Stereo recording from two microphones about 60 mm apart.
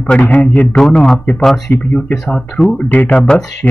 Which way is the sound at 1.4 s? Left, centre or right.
Centre.